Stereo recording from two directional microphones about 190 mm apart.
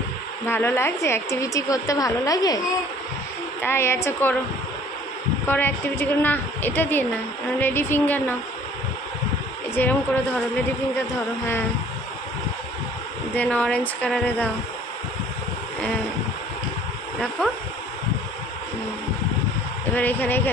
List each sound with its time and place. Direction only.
0.5 s a woman's voice: 10° left (ahead or behind)
3.6 s a woman's voice: 15° left (ahead or behind)
5.5 s a woman's voice: 10° left (ahead or behind)
9.8 s a woman's voice: 10° left (ahead or behind)
13.4 s a woman's voice: 5° left (ahead or behind)
19.9 s a woman's voice: 10° left (ahead or behind)